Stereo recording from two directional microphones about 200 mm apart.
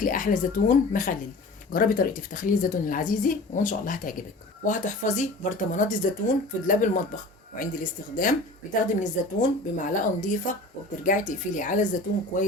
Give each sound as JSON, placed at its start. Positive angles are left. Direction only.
{"t": 0.0, "sound": "a woman's voice", "side_deg": 45}
{"t": 9.0, "sound": "speech", "side_deg": 40}